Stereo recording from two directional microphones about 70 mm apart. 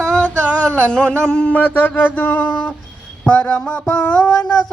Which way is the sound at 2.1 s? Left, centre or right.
Left.